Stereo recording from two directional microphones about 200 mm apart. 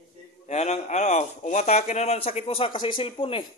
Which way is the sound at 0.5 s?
35° left (ahead or behind).